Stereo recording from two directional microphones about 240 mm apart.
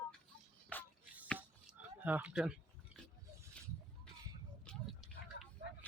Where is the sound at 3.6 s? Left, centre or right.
Centre.